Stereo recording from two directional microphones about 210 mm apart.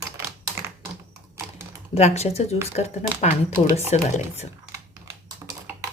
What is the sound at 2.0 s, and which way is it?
Speech, 30° left (ahead or behind).